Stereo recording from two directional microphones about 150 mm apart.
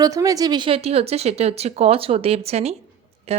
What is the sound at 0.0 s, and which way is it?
Speech, 25° right (ahead or behind).